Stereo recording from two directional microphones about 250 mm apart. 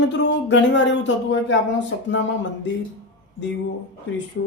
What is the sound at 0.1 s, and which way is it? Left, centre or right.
Speech, left.